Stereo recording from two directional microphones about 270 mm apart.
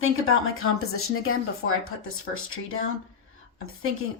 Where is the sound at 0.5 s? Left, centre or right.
Left.